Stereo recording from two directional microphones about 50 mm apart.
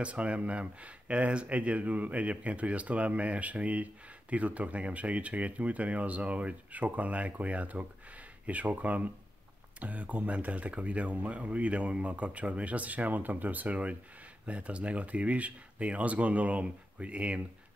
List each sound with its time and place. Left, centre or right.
0.0 s speech: right